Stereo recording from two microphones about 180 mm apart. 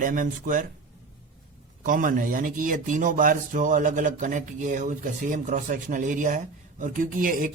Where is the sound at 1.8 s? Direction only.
50° right (ahead or behind).